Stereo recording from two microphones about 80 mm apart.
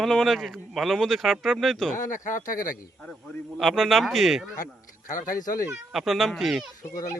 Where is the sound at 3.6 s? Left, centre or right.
Centre.